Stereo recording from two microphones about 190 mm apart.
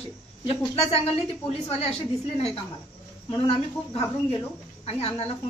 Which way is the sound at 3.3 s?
30° left (ahead or behind).